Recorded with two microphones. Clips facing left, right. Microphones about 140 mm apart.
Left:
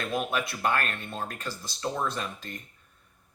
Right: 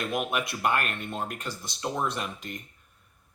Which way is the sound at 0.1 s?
15° right (ahead or behind).